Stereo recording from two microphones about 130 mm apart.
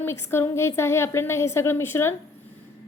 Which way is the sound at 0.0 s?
20° left (ahead or behind).